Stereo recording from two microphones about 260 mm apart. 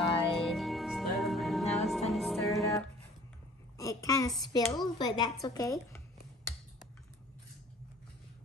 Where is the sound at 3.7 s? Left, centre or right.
Centre.